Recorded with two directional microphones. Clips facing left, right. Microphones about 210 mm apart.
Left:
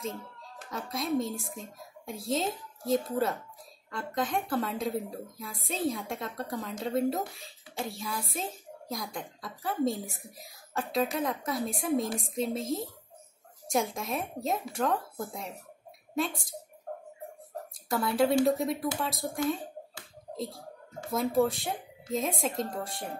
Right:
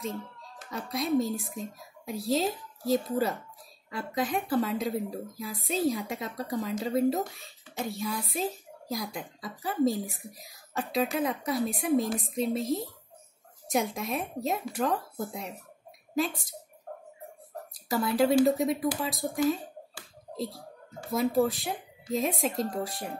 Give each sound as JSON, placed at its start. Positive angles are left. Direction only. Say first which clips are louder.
{"t": 0.7, "sound": "a woman's voice", "louder": "right 2 dB", "side_deg": 0}
{"t": 17.8, "sound": "a woman's voice", "louder": "right 1 dB", "side_deg": 0}
{"t": 21.1, "sound": "a woman's voice", "louder": "right 1 dB", "side_deg": 0}